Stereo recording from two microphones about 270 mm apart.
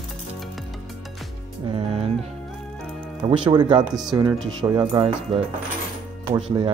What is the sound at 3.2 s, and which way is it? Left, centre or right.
Speech, centre.